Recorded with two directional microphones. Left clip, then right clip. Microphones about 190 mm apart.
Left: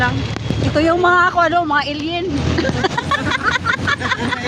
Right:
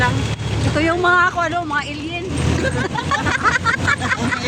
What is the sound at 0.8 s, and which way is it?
Speech, 35° left (ahead or behind).